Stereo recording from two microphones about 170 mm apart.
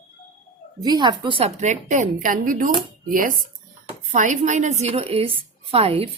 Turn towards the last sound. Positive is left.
turn(degrees=-35)  # may be behind; listen again after turning